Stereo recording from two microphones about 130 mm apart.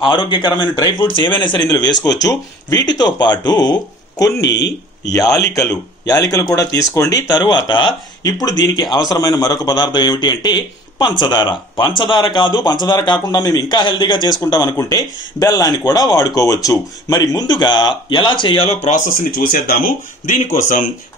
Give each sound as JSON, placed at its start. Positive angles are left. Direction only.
{"t": 0.1, "sound": "a man's voice", "side_deg": 35}
{"t": 18.9, "sound": "speech", "side_deg": 85}